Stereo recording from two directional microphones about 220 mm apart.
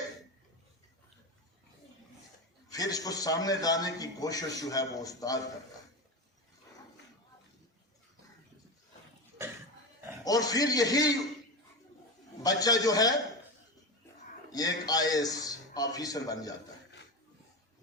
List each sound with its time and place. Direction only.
2.7 s a man's voice: 15° left (ahead or behind)
10.2 s a man's voice: 15° left (ahead or behind)
12.4 s a man's voice: 15° left (ahead or behind)
14.5 s a man's voice: 15° left (ahead or behind)